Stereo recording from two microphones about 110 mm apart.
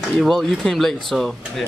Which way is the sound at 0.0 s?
Centre (ahead or behind).